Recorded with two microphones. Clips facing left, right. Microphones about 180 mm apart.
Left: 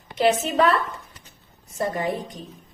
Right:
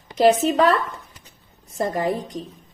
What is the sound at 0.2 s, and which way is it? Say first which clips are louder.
Speech: right 4 dB; 35° right (ahead or behind).